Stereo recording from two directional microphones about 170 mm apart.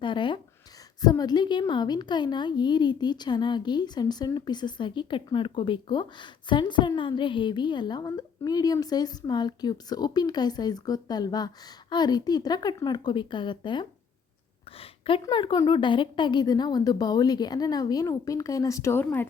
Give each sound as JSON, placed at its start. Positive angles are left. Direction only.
{"t": 0.0, "sound": "a woman's voice", "side_deg": 30}